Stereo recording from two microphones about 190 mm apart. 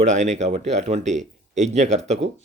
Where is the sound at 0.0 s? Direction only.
40° right (ahead or behind).